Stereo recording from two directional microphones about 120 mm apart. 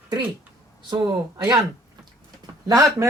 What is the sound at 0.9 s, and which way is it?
Speech, 35° right (ahead or behind).